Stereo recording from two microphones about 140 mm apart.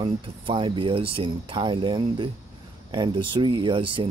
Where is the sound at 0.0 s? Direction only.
35° right (ahead or behind).